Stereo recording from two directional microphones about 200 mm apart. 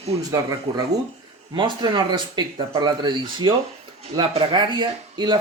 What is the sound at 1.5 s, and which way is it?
Speech, 25° right (ahead or behind).